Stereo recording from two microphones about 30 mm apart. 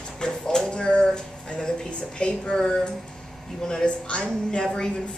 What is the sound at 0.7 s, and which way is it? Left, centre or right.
Speech, left.